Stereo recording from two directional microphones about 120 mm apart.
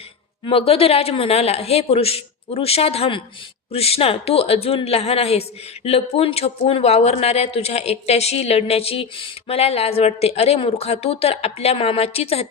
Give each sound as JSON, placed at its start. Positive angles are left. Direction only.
{"t": 0.4, "sound": "speech", "side_deg": 50}